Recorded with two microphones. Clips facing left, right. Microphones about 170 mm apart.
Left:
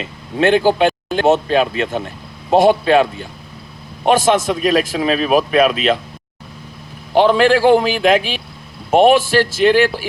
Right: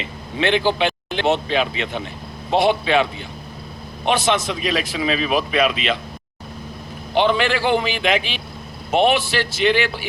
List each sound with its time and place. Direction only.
0.0 s a man's voice: 45° left (ahead or behind)
7.1 s a man's voice: 40° left (ahead or behind)